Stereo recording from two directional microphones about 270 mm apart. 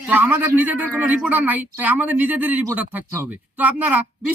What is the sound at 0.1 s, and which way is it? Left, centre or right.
A woman's voice, centre.